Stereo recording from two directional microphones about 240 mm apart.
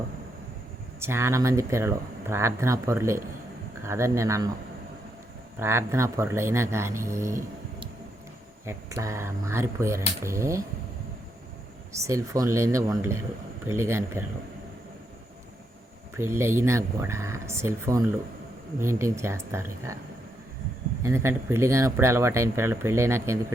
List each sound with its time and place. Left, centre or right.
0.9 s speech: centre
5.5 s speech: centre
11.9 s speech: centre
16.1 s speech: centre
21.0 s speech: centre